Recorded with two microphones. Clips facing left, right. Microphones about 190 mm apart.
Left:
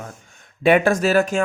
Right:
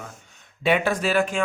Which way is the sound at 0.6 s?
50° left (ahead or behind).